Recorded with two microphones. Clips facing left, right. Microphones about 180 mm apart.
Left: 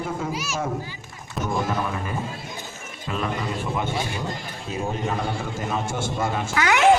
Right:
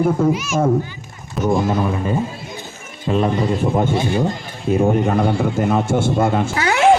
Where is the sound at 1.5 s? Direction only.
30° right (ahead or behind).